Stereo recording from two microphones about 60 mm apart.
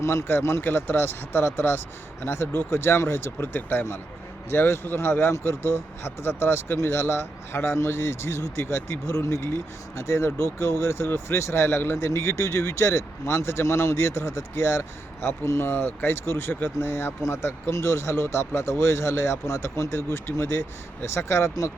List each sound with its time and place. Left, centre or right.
0.0 s speech: left